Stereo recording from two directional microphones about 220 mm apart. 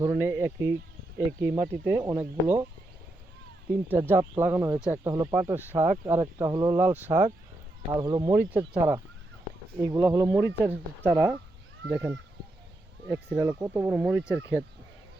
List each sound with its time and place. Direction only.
0.0 s speech: 10° right (ahead or behind)
4.1 s speech: 10° right (ahead or behind)
8.3 s speech: 10° right (ahead or behind)